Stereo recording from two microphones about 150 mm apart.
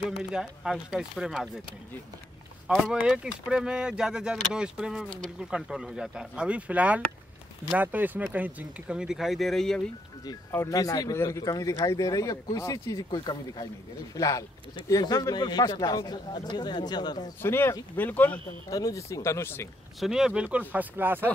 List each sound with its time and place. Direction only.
0.2 s speech: 5° right (ahead or behind)
2.7 s speech: 5° right (ahead or behind)
10.5 s speech: 20° left (ahead or behind)
17.4 s speech: 15° left (ahead or behind)
18.7 s speech: 25° left (ahead or behind)
20.0 s speech: 5° right (ahead or behind)